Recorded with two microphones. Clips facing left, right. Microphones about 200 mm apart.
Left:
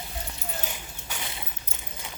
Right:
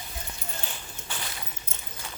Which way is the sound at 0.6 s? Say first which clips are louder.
Left 2 dB; 10° left (ahead or behind).